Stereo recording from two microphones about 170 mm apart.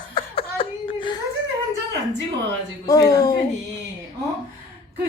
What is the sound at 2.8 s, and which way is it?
Speech, 20° left (ahead or behind).